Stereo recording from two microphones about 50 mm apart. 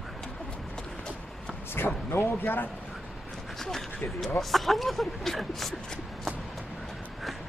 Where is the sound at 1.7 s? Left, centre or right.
Left.